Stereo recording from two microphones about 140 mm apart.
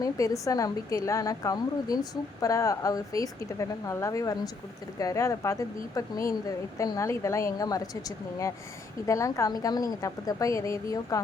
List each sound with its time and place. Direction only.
0.0 s a woman's voice: 25° left (ahead or behind)
9.0 s a woman's voice: 20° left (ahead or behind)